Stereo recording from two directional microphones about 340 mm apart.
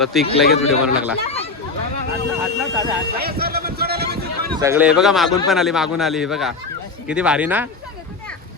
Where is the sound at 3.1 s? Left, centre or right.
Right.